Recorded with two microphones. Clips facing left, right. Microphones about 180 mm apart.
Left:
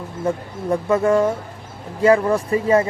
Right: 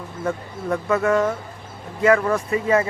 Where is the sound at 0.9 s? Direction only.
30° left (ahead or behind).